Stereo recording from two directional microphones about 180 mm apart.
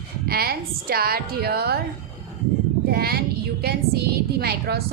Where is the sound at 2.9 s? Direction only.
60° right (ahead or behind).